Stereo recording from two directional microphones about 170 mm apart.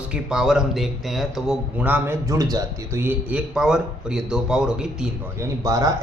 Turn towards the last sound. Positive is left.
turn(degrees=-20)  # may be behind; listen again after turning